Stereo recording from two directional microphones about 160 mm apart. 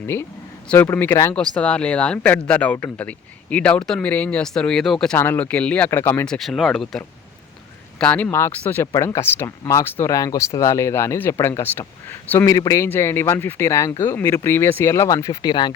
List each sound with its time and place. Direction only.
0.7 s speech: 10° left (ahead or behind)